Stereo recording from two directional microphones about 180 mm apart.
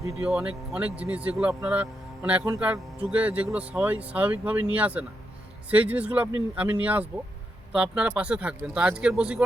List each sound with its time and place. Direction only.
0.1 s speech: centre (ahead or behind)